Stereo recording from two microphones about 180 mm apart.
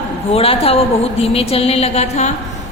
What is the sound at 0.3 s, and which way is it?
Speech, 35° left (ahead or behind).